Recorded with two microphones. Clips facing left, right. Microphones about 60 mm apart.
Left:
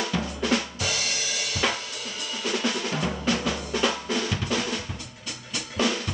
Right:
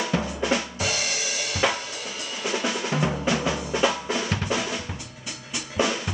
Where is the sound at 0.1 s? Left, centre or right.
Right.